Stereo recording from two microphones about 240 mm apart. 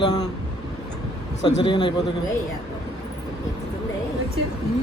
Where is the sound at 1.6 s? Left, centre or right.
Left.